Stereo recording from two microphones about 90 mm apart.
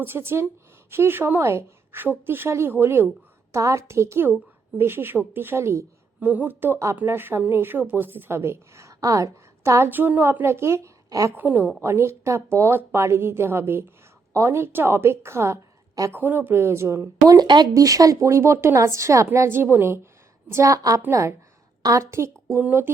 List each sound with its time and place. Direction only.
0.0 s a woman's voice: 25° right (ahead or behind)
6.1 s a woman's voice: 15° right (ahead or behind); by 9.9 s 30° right (ahead or behind)
9.9 s a woman's voice: 20° right (ahead or behind); by 11.3 s 35° right (ahead or behind)
11.3 s a woman's voice: 20° right (ahead or behind)
11.8 s a woman's voice: 30° right (ahead or behind)